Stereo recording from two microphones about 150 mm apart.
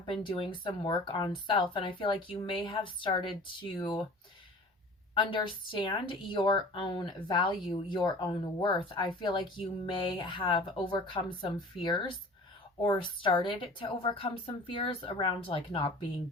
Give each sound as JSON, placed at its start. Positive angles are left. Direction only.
{"t": 0.1, "sound": "a woman's voice", "side_deg": 35}
{"t": 5.1, "sound": "a woman's voice", "side_deg": 35}